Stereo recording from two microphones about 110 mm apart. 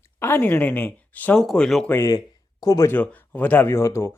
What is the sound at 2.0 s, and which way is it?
Speech, 35° left (ahead or behind).